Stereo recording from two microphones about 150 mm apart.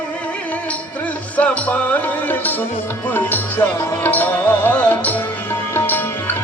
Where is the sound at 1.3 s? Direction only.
10° left (ahead or behind).